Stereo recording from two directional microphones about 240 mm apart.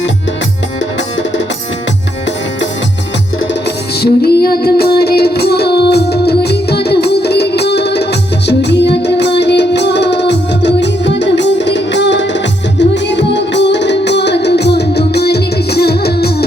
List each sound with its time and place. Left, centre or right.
4.0 s music: left